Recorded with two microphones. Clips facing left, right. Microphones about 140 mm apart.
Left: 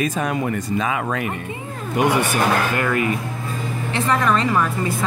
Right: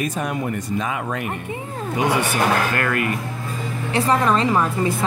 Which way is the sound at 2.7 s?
15° left (ahead or behind).